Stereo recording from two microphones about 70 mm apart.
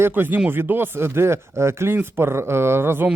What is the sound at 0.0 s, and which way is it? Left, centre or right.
Speech, right.